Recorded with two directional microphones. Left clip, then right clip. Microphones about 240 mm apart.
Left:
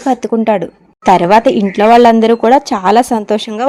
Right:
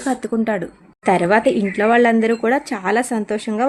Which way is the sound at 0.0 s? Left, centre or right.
Left.